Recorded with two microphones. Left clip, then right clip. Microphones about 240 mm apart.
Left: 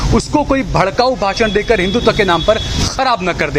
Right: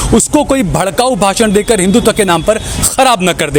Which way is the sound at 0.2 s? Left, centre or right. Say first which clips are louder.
Right 1 dB; right.